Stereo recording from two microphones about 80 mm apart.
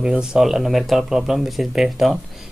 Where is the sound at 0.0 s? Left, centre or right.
Centre.